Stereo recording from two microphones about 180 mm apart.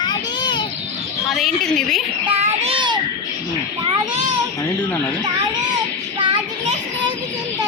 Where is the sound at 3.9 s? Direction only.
30° right (ahead or behind).